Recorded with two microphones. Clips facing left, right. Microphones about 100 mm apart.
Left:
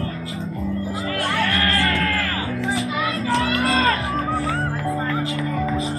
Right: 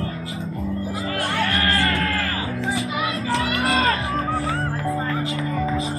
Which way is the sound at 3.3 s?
30° left (ahead or behind).